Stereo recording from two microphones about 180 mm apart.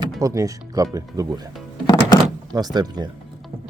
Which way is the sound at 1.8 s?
25° left (ahead or behind).